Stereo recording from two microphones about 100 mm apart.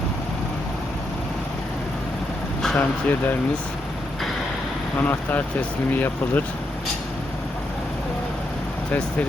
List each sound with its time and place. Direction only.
2.7 s speech: 20° left (ahead or behind)
4.9 s speech: 20° left (ahead or behind)